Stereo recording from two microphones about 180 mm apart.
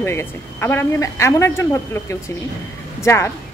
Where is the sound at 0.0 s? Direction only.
15° left (ahead or behind).